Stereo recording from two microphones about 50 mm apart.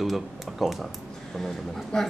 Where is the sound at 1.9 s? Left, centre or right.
Centre.